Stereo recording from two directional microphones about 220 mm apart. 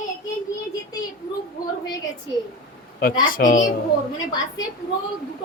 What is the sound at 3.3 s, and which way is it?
Speech, 35° left (ahead or behind).